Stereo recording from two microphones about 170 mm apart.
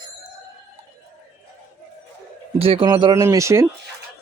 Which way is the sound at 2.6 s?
30° right (ahead or behind).